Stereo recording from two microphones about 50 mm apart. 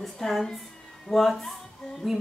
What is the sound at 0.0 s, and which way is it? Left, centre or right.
A man's voice, centre.